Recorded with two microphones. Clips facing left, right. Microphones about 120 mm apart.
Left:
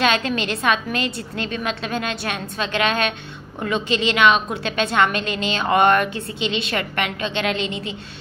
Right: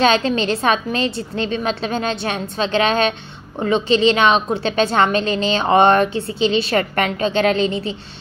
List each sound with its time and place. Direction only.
0.0 s a woman's voice: 30° right (ahead or behind)